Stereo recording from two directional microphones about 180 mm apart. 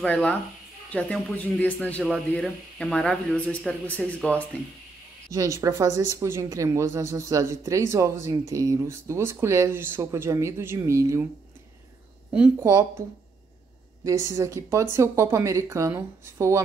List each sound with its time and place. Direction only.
0.0 s speech: 5° left (ahead or behind)
5.3 s a woman's voice: 20° right (ahead or behind)
12.3 s a woman's voice: 5° right (ahead or behind)
14.0 s a woman's voice: 15° right (ahead or behind)